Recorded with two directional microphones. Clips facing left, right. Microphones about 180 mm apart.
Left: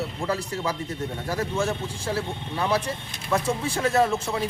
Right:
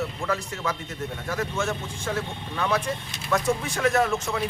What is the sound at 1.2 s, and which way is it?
A man's voice, 35° left (ahead or behind).